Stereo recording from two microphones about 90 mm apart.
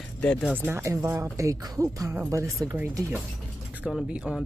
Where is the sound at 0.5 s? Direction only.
25° right (ahead or behind).